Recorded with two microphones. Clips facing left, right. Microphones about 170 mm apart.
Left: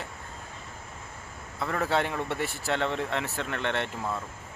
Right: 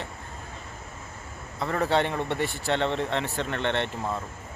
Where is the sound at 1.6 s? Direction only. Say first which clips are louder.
Right 3 dB; centre (ahead or behind).